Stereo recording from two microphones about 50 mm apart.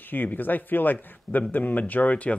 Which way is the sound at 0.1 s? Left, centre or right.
Left.